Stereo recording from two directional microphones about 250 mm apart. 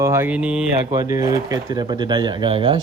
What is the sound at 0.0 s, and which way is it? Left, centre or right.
Speech, centre.